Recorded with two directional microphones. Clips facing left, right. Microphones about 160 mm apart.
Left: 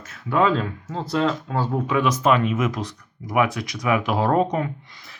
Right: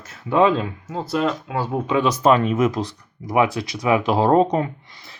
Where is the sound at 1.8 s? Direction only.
25° right (ahead or behind).